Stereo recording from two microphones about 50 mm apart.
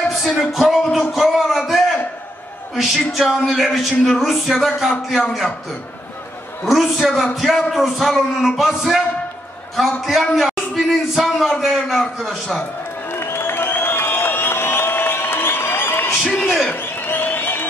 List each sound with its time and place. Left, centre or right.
0.1 s music: centre
0.9 s a sound: centre
2.7 s speech: centre
6.6 s a man's voice: centre
13.1 s crowd: left
16.4 s speech: centre
16.7 s a sound: left